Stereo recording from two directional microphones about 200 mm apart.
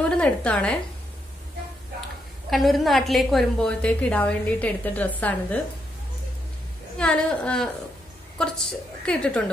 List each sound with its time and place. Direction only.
0.1 s a woman's voice: 5° left (ahead or behind)
2.5 s a woman's voice: centre (ahead or behind)
7.0 s a woman's voice: 5° left (ahead or behind)